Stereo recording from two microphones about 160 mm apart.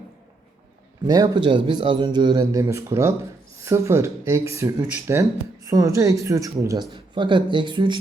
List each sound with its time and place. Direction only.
1.0 s a man's voice: 25° right (ahead or behind)
6.9 s speech: 30° right (ahead or behind)